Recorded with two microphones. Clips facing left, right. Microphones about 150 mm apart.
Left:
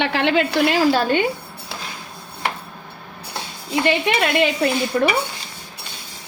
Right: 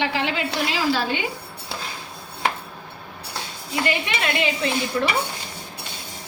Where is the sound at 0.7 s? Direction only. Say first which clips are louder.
Left 4 dB; 50° left (ahead or behind).